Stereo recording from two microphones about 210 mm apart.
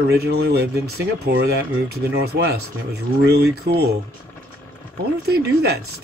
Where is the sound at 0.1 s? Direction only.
50° right (ahead or behind).